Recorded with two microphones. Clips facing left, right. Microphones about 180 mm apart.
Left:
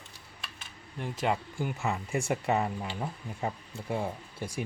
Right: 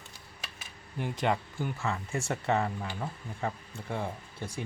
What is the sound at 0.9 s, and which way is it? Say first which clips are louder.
Speech: right 1 dB; centre (ahead or behind).